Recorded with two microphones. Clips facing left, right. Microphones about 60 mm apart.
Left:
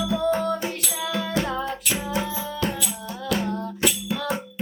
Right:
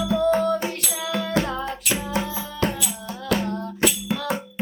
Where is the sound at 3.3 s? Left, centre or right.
Right.